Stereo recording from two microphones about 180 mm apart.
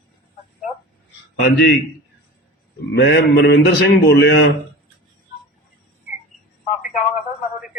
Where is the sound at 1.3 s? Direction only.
75° left (ahead or behind).